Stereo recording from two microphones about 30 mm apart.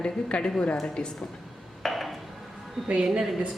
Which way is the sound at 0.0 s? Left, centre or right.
Left.